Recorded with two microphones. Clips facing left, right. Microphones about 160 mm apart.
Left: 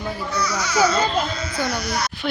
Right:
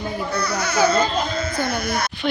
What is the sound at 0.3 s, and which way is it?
Speech, 55° right (ahead or behind).